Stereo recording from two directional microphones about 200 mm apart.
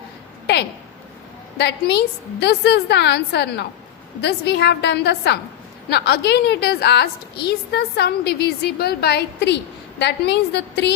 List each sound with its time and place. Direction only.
1.5 s a woman's voice: 55° left (ahead or behind)